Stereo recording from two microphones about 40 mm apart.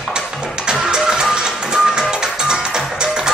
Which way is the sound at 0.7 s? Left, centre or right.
Centre.